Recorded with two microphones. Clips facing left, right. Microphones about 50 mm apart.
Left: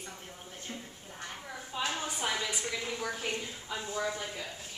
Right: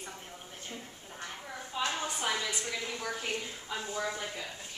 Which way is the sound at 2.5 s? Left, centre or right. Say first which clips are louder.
Left 1 dB; centre.